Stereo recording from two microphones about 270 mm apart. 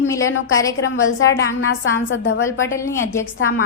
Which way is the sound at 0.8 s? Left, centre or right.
Left.